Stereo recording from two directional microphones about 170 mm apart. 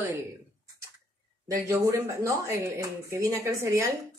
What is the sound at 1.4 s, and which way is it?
Speech, 20° right (ahead or behind).